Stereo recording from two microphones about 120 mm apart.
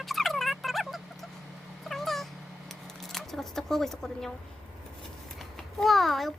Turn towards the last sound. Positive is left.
turn(degrees=0)  # may be behind; listen again after turning